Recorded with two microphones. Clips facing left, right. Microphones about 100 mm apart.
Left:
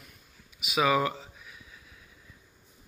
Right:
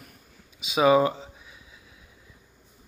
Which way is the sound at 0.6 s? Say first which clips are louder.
Right 6 dB; 30° right (ahead or behind).